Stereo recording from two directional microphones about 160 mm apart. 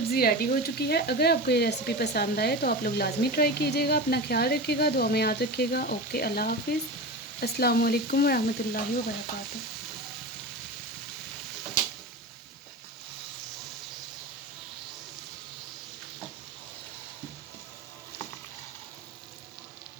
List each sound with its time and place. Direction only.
0.1 s speech: 70° left (ahead or behind)